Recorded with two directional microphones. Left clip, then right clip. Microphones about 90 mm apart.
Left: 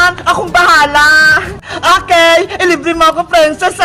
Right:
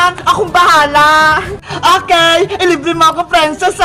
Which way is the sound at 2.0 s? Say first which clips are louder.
Left 2 dB; 35° left (ahead or behind).